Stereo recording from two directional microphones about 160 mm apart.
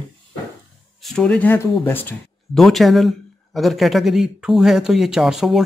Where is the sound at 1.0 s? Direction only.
5° left (ahead or behind).